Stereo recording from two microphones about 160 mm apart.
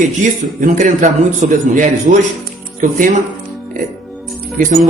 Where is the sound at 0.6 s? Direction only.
50° right (ahead or behind).